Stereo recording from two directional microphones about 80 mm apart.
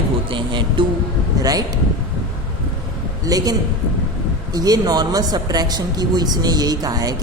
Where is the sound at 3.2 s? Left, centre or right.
Right.